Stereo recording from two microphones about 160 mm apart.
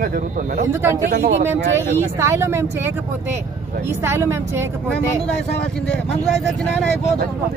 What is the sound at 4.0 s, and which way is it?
Speech, 15° right (ahead or behind).